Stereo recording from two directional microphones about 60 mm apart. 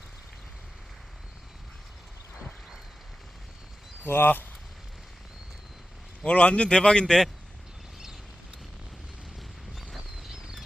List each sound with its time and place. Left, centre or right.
4.0 s speech: left
6.2 s speech: centre
9.9 s a sound: centre